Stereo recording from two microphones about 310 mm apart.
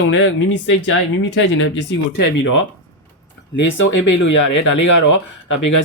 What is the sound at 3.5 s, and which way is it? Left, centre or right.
Speech, left.